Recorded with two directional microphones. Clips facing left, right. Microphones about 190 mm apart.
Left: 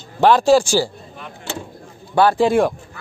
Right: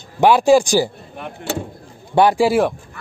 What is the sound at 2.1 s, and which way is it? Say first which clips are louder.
Speech: right 1 dB; 15° right (ahead or behind).